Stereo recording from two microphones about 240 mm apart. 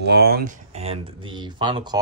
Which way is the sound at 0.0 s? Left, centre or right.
Right.